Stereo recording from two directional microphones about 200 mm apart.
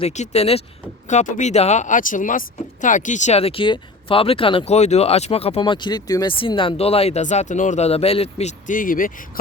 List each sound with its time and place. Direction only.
0.0 s speech: 35° left (ahead or behind)